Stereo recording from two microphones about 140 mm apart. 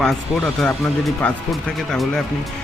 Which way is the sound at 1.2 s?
5° left (ahead or behind).